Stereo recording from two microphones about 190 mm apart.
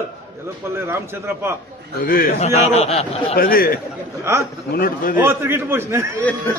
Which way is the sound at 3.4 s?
50° left (ahead or behind).